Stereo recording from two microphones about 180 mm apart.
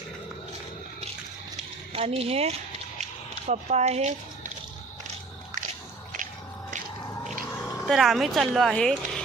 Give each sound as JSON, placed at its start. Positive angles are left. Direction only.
{"t": 1.9, "sound": "speech", "side_deg": -35}
{"t": 3.0, "sound": "a sound", "side_deg": -40}
{"t": 7.6, "sound": "speech", "side_deg": 5}